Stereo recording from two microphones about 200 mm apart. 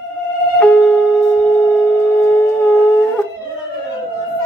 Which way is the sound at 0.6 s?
5° left (ahead or behind).